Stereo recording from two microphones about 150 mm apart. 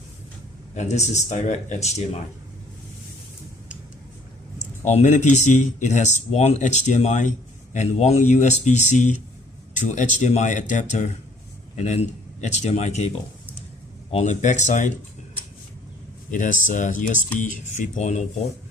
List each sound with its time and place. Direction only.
0.7 s speech: 50° left (ahead or behind)
4.8 s speech: 50° left (ahead or behind)
14.1 s speech: 50° left (ahead or behind)
16.3 s speech: 60° left (ahead or behind)